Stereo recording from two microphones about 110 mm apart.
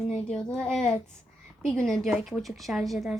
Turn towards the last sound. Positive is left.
turn(degrees=0)  # may be behind; listen again after turning